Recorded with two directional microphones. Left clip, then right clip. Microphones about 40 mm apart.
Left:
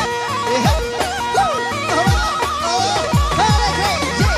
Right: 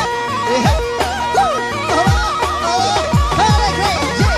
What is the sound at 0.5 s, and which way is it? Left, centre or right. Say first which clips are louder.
Music: right 2 dB; right.